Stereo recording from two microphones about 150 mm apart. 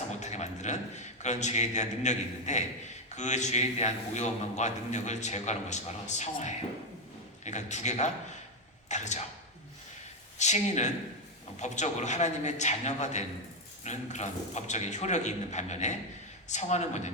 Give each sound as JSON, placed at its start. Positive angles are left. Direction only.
{"t": 0.2, "sound": "a man's voice", "side_deg": 50}
{"t": 10.3, "sound": "a man's voice", "side_deg": 50}